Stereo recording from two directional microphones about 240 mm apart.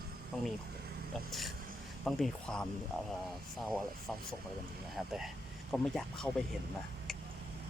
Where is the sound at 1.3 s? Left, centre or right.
Centre.